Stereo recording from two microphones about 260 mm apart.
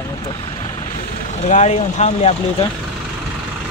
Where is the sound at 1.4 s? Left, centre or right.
Left.